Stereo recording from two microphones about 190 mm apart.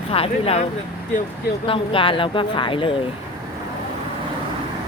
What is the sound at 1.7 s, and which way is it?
Speech, 30° left (ahead or behind).